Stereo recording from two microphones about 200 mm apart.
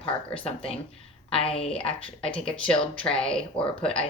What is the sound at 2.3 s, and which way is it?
Speech, 5° left (ahead or behind).